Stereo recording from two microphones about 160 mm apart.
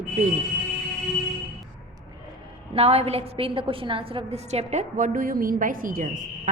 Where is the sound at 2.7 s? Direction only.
40° right (ahead or behind).